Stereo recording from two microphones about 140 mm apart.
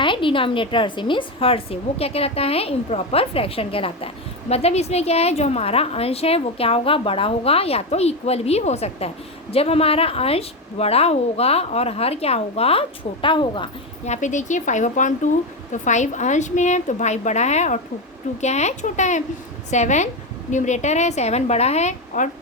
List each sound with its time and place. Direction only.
0.0 s a woman's voice: 35° left (ahead or behind)
14.0 s a woman's voice: 60° left (ahead or behind)